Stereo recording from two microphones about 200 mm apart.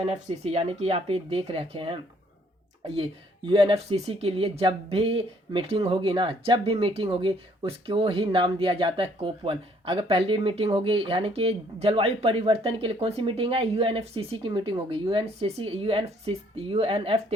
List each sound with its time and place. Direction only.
0.0 s speech: 30° right (ahead or behind)